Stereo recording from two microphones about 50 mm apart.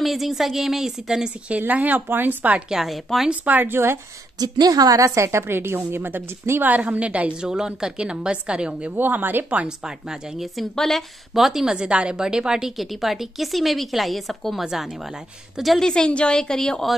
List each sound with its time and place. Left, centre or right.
0.0 s speech: centre
1.6 s speech: right
2.7 s speech: centre
3.4 s a woman's voice: right
5.0 s a woman's voice: right
5.5 s a woman's voice: right
6.5 s a woman's voice: right
6.9 s a woman's voice: right
7.3 s a woman's voice: centre
8.9 s speech: right
9.7 s a woman's voice: centre
10.5 s a woman's voice: centre
12.7 s speech: centre
15.8 s a woman's voice: centre